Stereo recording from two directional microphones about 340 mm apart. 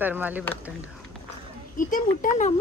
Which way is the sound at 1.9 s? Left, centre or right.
Left.